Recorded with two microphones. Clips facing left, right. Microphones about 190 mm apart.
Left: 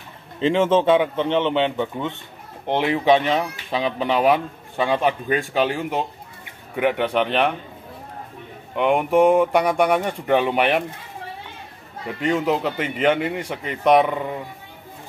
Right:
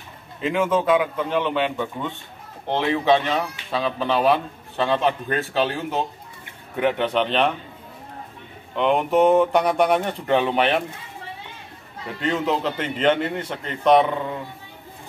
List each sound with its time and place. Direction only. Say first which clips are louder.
0.4 s a man's voice: left 4 dB; 30° left (ahead or behind); by 7.4 s 10° left (ahead or behind)
8.7 s speech: left 1 dB; 10° left (ahead or behind)
12.2 s speech: left 2 dB; 10° left (ahead or behind)